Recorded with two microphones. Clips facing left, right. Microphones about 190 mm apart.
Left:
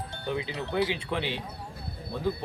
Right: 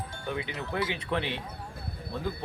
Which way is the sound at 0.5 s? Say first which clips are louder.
Left 5 dB; 20° left (ahead or behind).